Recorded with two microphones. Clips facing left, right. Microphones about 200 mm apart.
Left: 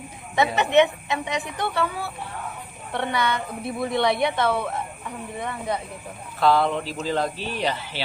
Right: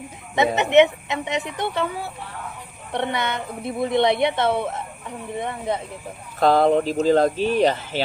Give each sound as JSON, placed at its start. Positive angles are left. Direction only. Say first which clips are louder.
{"t": 0.3, "sound": "a woman's voice", "louder": "right 3 dB", "side_deg": -20}
{"t": 6.4, "sound": "speech", "louder": "right 4 dB", "side_deg": -45}